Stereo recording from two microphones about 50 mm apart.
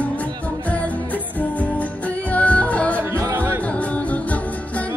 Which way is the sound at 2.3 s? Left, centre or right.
Left.